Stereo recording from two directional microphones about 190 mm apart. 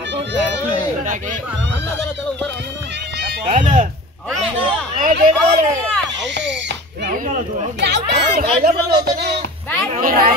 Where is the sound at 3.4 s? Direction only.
40° right (ahead or behind).